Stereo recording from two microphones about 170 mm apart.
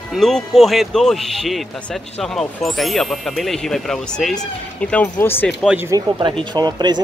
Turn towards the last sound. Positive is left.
turn(degrees=-25)  # may be behind; listen again after turning